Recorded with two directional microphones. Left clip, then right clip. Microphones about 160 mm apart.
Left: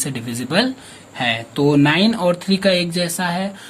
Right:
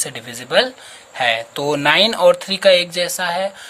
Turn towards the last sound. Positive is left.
turn(degrees=-30)  # may be behind; listen again after turning